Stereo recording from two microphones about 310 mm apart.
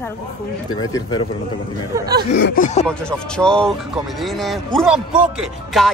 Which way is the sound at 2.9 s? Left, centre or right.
Centre.